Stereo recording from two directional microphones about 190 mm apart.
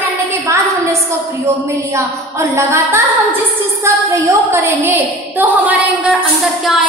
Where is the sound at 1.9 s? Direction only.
15° right (ahead or behind).